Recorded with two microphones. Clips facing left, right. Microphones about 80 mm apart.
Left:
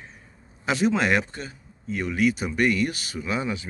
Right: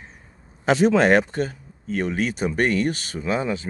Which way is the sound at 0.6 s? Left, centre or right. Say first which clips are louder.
Right 6 dB; right.